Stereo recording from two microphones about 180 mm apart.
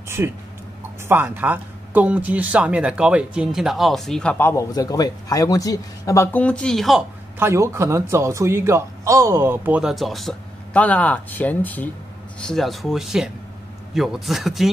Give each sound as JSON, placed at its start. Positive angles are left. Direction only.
{"t": 0.2, "sound": "a man's voice", "side_deg": -15}
{"t": 7.3, "sound": "a man's voice", "side_deg": -15}